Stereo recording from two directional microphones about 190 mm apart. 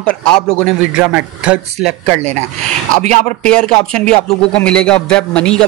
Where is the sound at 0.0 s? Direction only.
5° left (ahead or behind).